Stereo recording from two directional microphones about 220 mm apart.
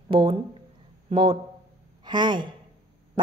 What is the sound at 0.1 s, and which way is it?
Speech, 25° right (ahead or behind).